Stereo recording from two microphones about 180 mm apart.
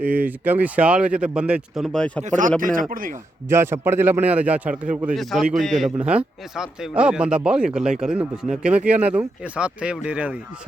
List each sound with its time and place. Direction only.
0.0 s a man's voice: 10° right (ahead or behind)
2.2 s speech: 45° right (ahead or behind)
3.5 s a man's voice: 15° right (ahead or behind)